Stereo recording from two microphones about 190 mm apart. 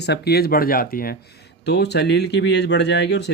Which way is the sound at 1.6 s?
60° left (ahead or behind).